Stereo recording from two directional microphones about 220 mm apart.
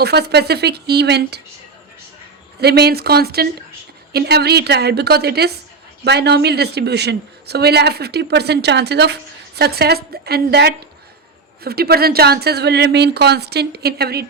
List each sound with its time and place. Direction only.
0.0 s a woman's voice: 45° right (ahead or behind)
2.6 s a woman's voice: 45° right (ahead or behind)